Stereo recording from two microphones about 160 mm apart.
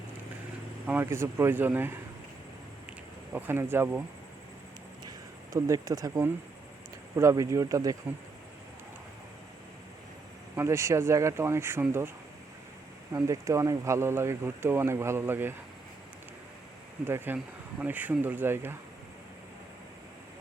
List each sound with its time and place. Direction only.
0.9 s speech: 15° right (ahead or behind)
3.3 s speech: 15° right (ahead or behind)
5.0 s speech: 20° right (ahead or behind)
10.5 s speech: 15° right (ahead or behind)
13.1 s speech: 20° right (ahead or behind)
17.1 s speech: 15° right (ahead or behind)